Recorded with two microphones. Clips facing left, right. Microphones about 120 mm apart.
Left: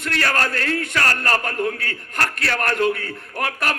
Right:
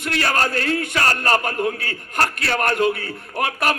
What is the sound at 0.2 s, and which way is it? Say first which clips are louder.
A man's voice: right 2 dB; 25° right (ahead or behind).